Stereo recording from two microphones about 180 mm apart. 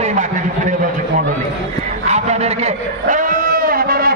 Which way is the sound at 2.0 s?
40° right (ahead or behind).